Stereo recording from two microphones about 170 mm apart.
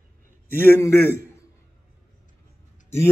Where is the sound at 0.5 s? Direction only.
15° left (ahead or behind).